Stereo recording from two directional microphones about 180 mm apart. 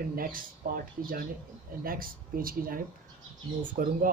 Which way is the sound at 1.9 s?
55° right (ahead or behind).